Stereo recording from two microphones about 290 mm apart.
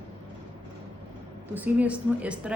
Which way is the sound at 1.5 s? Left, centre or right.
Centre.